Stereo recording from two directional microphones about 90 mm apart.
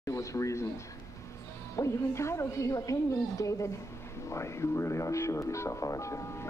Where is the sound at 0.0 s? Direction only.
35° left (ahead or behind).